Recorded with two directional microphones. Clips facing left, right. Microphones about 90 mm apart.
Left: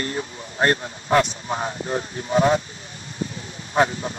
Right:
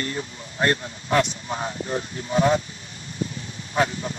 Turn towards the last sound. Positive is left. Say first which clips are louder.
# left 3 dB
turn(degrees=30)  # may be behind; listen again after turning